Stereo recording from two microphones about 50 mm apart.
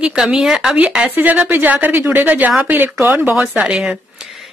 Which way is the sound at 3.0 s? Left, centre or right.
Right.